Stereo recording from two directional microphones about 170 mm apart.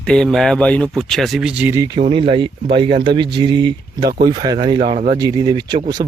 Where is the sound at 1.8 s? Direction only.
25° right (ahead or behind).